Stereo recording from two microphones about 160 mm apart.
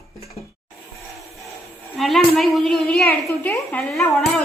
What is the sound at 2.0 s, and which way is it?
A woman's voice, centre (ahead or behind).